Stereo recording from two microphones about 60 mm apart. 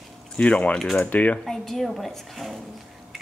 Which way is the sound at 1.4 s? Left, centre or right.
Centre.